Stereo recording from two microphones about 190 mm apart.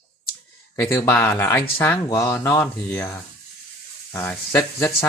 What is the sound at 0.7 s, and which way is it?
Speech, 15° left (ahead or behind).